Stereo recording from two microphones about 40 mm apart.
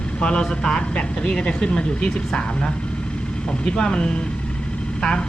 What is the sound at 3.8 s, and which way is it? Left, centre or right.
Speech, left.